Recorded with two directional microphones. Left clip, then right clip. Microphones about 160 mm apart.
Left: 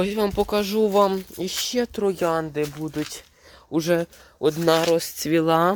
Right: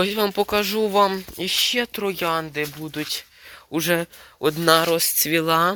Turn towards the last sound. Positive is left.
turn(degrees=20)  # may be behind; listen again after turning